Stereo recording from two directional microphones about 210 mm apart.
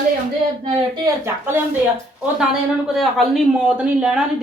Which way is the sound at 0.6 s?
20° right (ahead or behind).